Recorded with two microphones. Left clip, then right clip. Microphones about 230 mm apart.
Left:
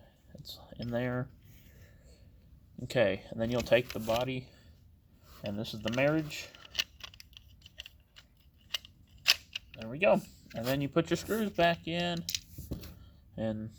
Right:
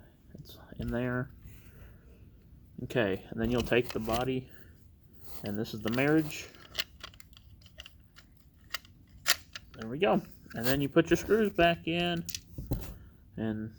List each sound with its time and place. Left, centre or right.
0.3 s a sound: left
0.9 s speech: left
2.8 s speech: left
5.5 s speech: left
6.5 s a sound: centre
8.7 s camera: centre
9.9 s speech: left
13.3 s speech: left